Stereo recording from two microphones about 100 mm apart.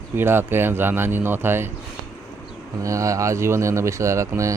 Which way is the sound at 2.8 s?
30° right (ahead or behind).